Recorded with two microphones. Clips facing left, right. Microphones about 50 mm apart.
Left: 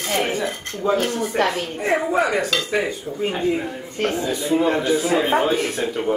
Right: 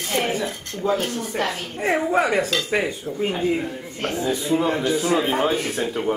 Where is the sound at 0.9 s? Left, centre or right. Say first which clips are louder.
Left 4 dB; left.